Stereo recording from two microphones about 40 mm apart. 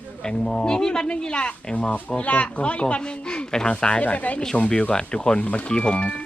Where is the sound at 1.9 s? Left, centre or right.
Left.